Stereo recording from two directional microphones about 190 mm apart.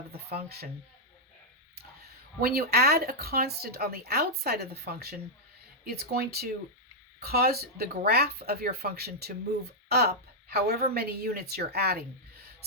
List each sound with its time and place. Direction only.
0.1 s speech: 55° right (ahead or behind)
2.4 s speech: 55° right (ahead or behind)